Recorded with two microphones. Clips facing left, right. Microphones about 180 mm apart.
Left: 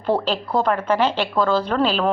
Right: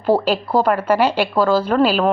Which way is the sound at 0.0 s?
5° right (ahead or behind).